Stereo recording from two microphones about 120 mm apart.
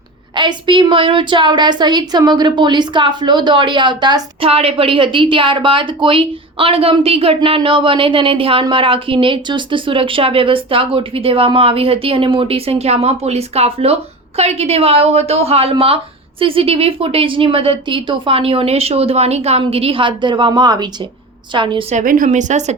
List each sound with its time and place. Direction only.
0.3 s a woman's voice: 40° right (ahead or behind)
4.4 s a woman's voice: 55° right (ahead or behind)
21.8 s speech: 90° right